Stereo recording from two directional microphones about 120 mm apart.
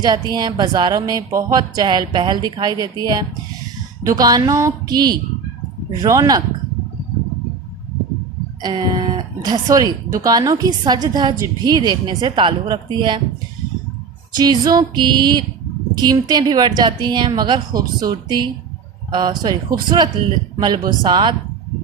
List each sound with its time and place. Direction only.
0.0 s speech: 35° right (ahead or behind)
8.6 s speech: 35° right (ahead or behind)
14.3 s speech: 35° right (ahead or behind)